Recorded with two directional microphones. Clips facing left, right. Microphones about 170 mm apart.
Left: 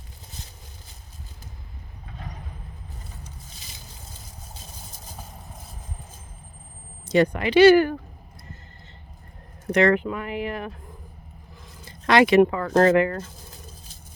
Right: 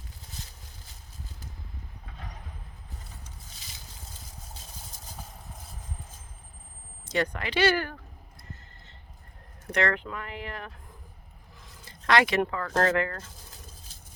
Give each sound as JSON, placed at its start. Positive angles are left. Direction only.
{"t": 0.3, "sound": "a sound", "side_deg": 20}
{"t": 3.5, "sound": "vehicle", "side_deg": 20}
{"t": 7.1, "sound": "speech", "side_deg": 15}
{"t": 9.7, "sound": "speech", "side_deg": 10}
{"t": 12.0, "sound": "speech", "side_deg": 15}